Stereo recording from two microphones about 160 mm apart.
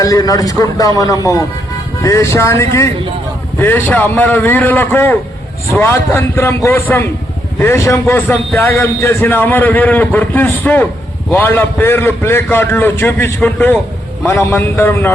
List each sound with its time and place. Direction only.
0.0 s a man's voice: 20° left (ahead or behind)